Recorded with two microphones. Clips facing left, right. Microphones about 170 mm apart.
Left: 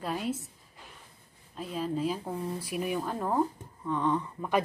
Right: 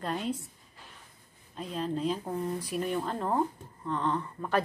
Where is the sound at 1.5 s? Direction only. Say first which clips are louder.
Even; 5° left (ahead or behind).